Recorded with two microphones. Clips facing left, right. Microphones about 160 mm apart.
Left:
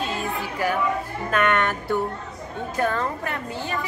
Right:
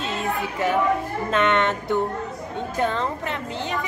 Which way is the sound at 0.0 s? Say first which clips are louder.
Right 1 dB; 25° right (ahead or behind).